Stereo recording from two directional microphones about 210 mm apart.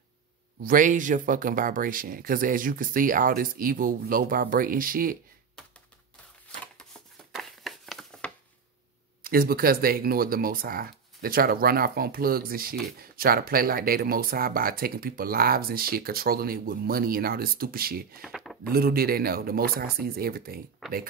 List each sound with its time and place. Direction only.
0.6 s speech: 40° right (ahead or behind)
7.3 s a sound: centre (ahead or behind)
9.2 s speech: 45° right (ahead or behind)
18.2 s speech: centre (ahead or behind)
18.7 s speech: 45° right (ahead or behind)